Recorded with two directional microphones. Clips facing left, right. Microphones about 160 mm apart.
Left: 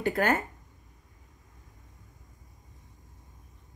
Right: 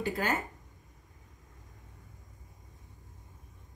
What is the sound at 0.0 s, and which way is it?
Speech, 60° left (ahead or behind).